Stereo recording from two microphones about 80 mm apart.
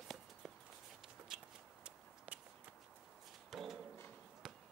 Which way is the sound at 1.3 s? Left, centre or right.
Centre.